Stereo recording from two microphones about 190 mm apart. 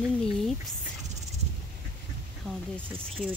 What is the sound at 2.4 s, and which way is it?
Speech, 5° left (ahead or behind).